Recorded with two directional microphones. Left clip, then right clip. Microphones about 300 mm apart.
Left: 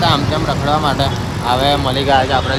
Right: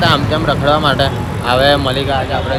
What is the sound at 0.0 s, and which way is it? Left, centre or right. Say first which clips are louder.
Speech: right 2 dB; centre.